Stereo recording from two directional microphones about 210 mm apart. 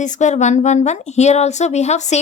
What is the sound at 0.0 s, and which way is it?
Speech, 35° left (ahead or behind).